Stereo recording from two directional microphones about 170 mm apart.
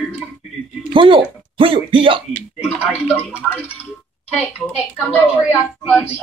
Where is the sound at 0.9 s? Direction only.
30° right (ahead or behind).